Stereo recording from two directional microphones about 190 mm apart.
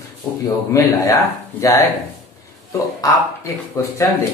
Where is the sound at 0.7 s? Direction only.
15° left (ahead or behind).